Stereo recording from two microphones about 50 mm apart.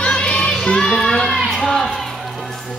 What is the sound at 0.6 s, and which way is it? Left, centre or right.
Speech, centre.